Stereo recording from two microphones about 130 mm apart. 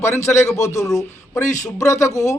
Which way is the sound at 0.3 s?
20° left (ahead or behind).